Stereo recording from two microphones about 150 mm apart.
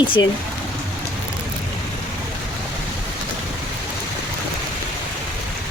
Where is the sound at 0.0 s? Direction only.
35° left (ahead or behind).